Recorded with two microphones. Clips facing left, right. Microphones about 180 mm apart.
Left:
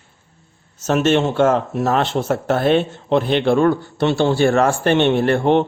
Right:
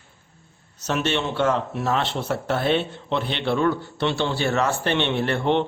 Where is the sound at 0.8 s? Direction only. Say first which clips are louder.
Left 8 dB; 45° left (ahead or behind).